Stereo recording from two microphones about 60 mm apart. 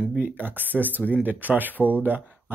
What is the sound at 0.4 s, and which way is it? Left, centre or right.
Speech, right.